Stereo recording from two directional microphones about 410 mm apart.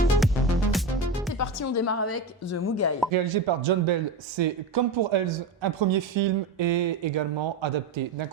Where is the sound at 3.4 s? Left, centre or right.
Right.